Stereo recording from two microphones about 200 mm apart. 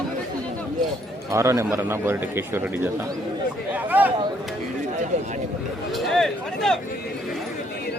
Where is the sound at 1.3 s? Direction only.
15° right (ahead or behind).